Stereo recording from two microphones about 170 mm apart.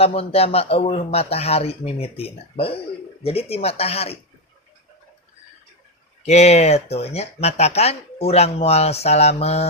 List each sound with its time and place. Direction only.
0.0 s speech: 35° left (ahead or behind)
6.2 s speech: 40° left (ahead or behind)